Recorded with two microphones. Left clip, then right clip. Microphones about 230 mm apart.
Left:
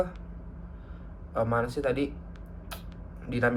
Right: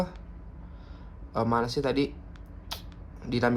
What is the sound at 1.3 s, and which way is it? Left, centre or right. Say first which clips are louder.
Speech: right 1 dB; right.